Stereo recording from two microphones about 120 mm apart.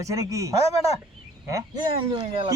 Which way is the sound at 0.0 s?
25° right (ahead or behind).